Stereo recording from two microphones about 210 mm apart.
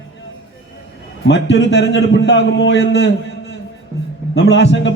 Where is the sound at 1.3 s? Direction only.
55° left (ahead or behind).